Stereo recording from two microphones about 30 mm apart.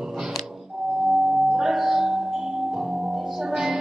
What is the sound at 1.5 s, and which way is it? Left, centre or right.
Music, centre.